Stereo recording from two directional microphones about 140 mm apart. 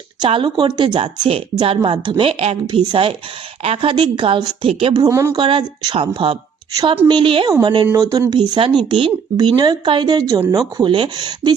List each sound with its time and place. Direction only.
0.2 s speech: 35° right (ahead or behind)
2.6 s speech: 35° right (ahead or behind)
5.0 s speech: 25° right (ahead or behind)
5.4 s speech: 40° right (ahead or behind)